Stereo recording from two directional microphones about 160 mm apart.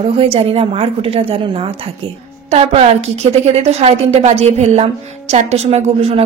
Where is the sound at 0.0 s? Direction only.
35° right (ahead or behind).